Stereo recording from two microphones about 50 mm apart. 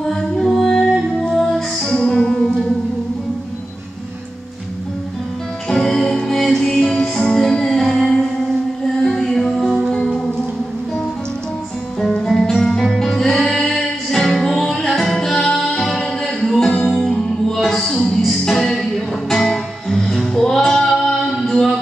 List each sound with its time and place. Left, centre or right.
0.0 s music: centre
5.7 s music: centre
12.0 s music: centre